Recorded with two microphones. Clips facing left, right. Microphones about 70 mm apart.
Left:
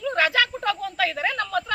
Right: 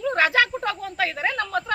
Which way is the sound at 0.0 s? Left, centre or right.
Right.